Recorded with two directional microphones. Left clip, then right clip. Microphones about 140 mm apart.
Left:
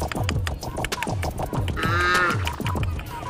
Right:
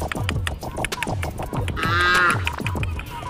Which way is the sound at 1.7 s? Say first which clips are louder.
Right 3 dB; 20° right (ahead or behind).